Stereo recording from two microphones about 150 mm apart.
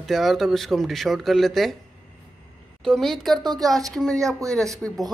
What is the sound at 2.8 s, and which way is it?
Speech, 5° left (ahead or behind).